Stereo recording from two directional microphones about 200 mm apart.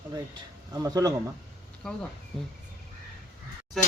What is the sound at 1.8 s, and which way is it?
Speech, 5° left (ahead or behind).